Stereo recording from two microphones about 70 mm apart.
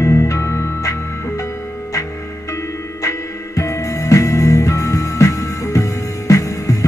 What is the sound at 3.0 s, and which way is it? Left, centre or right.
Music, left.